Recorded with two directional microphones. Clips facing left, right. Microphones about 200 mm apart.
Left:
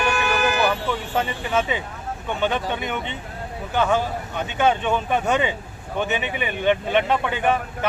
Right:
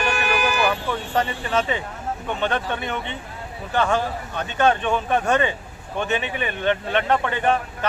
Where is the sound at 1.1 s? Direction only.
10° left (ahead or behind).